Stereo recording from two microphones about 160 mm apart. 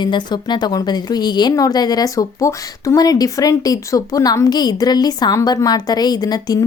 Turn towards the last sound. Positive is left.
turn(degrees=25)  # may be behind; listen again after turning